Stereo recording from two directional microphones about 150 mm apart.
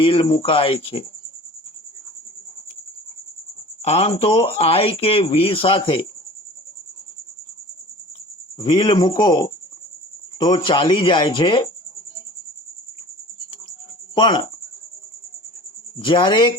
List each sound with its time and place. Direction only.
0.0 s speech: 35° left (ahead or behind)
3.8 s speech: 40° left (ahead or behind)
8.5 s speech: 35° left (ahead or behind)
14.2 s speech: 30° left (ahead or behind)
16.0 s speech: 30° left (ahead or behind)